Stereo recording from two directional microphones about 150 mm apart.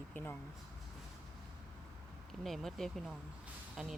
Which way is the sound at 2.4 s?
Centre (ahead or behind).